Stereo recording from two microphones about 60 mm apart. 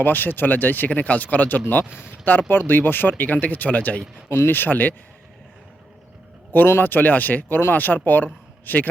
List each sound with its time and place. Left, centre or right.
0.0 s speech: left
1.8 s speech: centre
2.5 s speech: left
4.3 s speech: left
6.5 s speech: left